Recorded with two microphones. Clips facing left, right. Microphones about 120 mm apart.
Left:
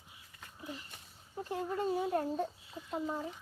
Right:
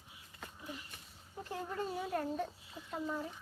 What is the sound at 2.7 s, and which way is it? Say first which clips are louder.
Chicken: left 2 dB; 20° left (ahead or behind).